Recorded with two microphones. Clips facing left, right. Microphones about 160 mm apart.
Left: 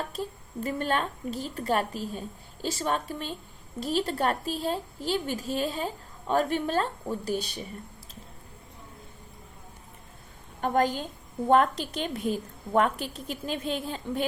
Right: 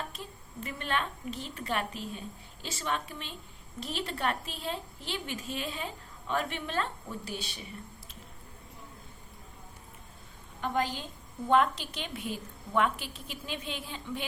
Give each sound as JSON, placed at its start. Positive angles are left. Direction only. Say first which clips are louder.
{"t": 0.1, "sound": "a woman's voice", "louder": "left 10 dB", "side_deg": 40}
{"t": 10.6, "sound": "a woman's voice", "louder": "left 6 dB", "side_deg": 50}